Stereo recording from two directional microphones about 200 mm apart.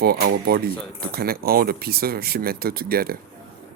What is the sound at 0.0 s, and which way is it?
Speech, 55° right (ahead or behind).